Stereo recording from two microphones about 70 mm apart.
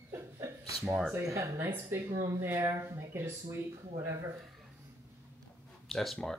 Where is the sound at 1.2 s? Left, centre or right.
Right.